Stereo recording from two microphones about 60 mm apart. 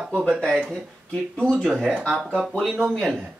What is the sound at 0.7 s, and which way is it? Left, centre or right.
Speech, centre.